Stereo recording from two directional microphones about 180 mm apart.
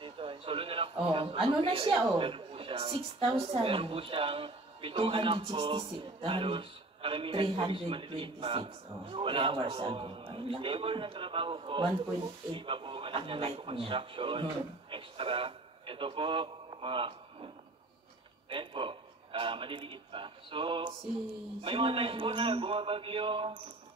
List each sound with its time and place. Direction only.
0.0 s a man's voice: 30° right (ahead or behind)
18.5 s a man's voice: 30° right (ahead or behind)